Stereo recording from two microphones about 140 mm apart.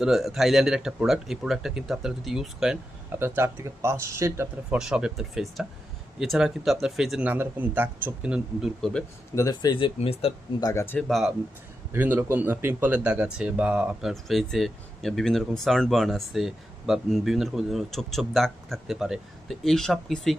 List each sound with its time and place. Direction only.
0.0 s speech: 5° right (ahead or behind)
3.2 s speech: 15° right (ahead or behind)
4.7 s speech: 5° right (ahead or behind)
9.3 s speech: 25° left (ahead or behind); by 10.3 s 45° left (ahead or behind)
10.6 s speech: 20° left (ahead or behind)
10.9 s speech: centre (ahead or behind)
11.9 s speech: 15° right (ahead or behind); by 20.3 s centre (ahead or behind)